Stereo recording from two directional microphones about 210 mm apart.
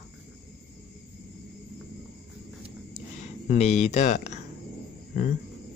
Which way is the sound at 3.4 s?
30° left (ahead or behind).